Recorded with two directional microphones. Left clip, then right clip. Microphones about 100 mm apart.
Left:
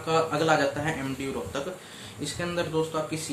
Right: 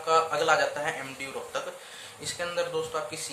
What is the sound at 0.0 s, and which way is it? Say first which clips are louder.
Speech: right 1 dB; 35° right (ahead or behind).